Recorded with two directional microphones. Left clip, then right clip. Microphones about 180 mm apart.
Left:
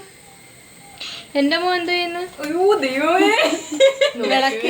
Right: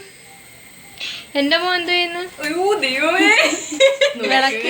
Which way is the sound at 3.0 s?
40° left (ahead or behind).